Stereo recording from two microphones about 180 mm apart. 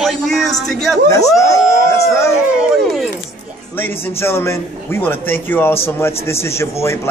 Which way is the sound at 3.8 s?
15° left (ahead or behind).